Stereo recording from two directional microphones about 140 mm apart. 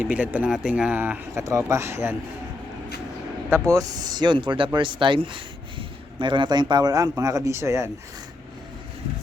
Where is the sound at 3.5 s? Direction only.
25° right (ahead or behind).